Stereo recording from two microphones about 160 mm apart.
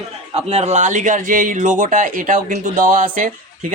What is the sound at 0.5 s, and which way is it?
Speech, 45° right (ahead or behind).